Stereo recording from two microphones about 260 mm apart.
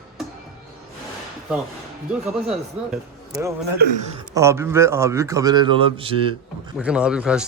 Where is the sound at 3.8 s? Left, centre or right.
Right.